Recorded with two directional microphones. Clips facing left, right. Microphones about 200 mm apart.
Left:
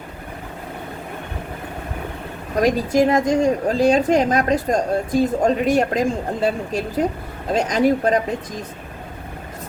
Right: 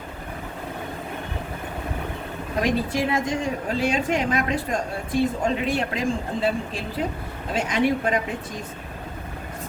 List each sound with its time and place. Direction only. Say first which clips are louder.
2.6 s a woman's voice: left 7 dB; 40° left (ahead or behind)